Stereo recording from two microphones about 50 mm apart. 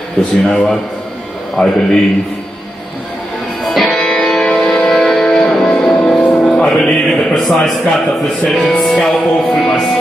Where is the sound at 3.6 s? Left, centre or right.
Centre.